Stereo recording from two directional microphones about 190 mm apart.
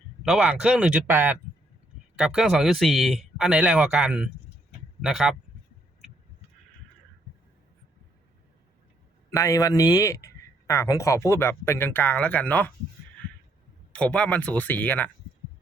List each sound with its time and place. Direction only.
0.2 s a man's voice: 5° right (ahead or behind)
9.3 s a man's voice: 15° left (ahead or behind)
13.9 s a man's voice: 5° left (ahead or behind)